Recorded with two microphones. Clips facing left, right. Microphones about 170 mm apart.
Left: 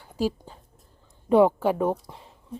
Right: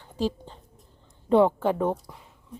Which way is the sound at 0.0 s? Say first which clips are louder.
Left 1 dB; 10° left (ahead or behind).